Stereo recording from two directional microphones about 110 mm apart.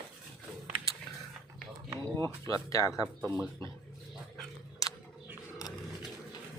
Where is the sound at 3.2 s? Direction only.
5° right (ahead or behind).